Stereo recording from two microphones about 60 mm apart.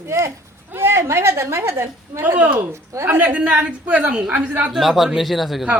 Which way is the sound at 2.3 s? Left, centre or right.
Right.